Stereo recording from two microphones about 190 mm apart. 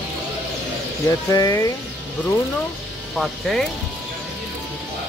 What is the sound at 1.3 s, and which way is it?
Speech, 15° left (ahead or behind).